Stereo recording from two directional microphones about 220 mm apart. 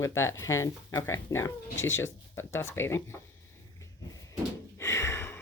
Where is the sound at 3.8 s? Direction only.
15° left (ahead or behind).